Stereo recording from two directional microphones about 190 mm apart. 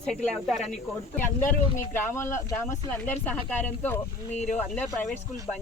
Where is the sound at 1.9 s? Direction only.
10° left (ahead or behind).